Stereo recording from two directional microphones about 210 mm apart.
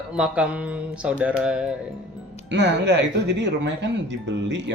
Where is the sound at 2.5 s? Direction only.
55° right (ahead or behind).